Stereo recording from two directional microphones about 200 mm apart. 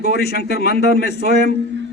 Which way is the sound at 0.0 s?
50° left (ahead or behind).